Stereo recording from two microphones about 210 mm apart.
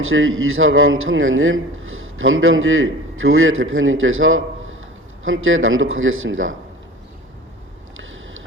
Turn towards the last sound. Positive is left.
turn(degrees=-70)  # may be behind; listen again after turning